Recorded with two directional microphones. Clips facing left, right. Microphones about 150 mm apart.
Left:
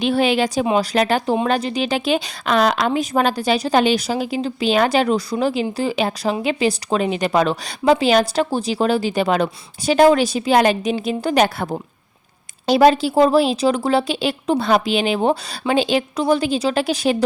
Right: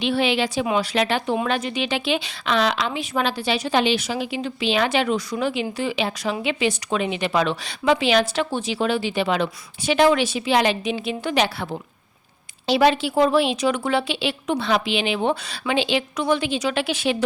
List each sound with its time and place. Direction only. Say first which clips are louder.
0.0 s speech: left 4 dB; 45° left (ahead or behind)